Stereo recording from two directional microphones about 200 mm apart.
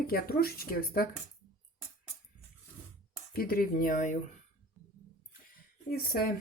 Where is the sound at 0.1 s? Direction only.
50° left (ahead or behind).